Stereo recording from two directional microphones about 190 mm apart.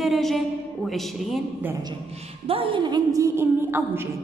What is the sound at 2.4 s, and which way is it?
A woman's voice, 30° right (ahead or behind).